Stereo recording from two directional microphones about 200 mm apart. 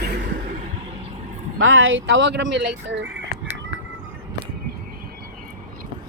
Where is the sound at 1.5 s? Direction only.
80° right; by 3.2 s 60° right (ahead or behind).